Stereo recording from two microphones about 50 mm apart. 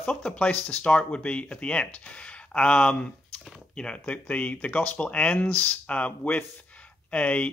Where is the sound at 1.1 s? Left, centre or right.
Left.